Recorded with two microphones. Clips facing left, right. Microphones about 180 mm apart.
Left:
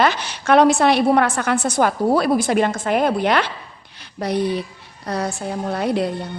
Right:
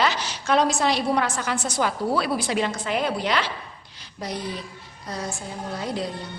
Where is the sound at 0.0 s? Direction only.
55° left (ahead or behind).